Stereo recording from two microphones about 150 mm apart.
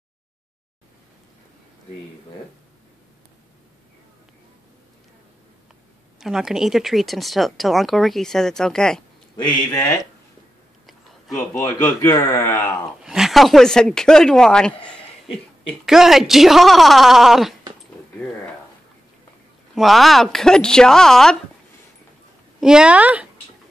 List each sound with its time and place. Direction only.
6.1 s speech: centre (ahead or behind)
11.3 s speech: 15° left (ahead or behind)
13.0 s speech: 5° right (ahead or behind)
19.7 s speech: centre (ahead or behind)
22.6 s speech: 5° right (ahead or behind)